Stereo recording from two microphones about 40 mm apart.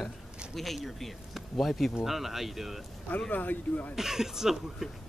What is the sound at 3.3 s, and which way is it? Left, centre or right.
Speech, left.